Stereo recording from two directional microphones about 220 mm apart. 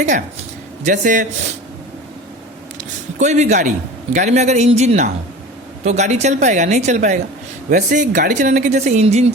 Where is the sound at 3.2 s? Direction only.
30° right (ahead or behind).